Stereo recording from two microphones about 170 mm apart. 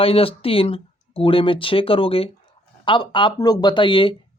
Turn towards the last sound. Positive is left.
turn(degrees=30)  # may be behind; listen again after turning